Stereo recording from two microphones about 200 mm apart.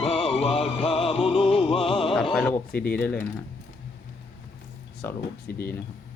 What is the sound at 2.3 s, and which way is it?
Speech, 10° left (ahead or behind).